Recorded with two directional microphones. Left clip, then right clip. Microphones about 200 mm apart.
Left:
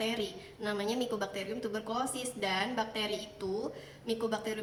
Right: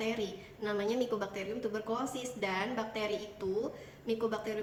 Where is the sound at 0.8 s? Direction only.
20° left (ahead or behind).